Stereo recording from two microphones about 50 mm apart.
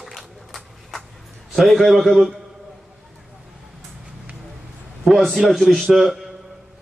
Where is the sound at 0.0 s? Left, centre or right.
Centre.